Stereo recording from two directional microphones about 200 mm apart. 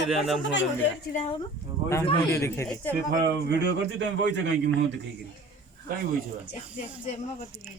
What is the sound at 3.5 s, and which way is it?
A man's voice, 60° right (ahead or behind).